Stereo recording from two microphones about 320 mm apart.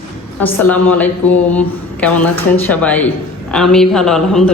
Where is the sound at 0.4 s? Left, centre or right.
Centre.